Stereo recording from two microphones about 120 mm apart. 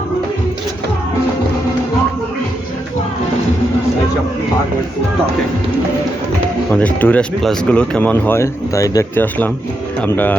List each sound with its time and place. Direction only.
6.7 s speech: 10° left (ahead or behind)
10.1 s speech: 15° left (ahead or behind)